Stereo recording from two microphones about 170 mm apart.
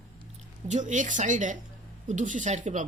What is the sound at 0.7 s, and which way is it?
Speech, 45° right (ahead or behind).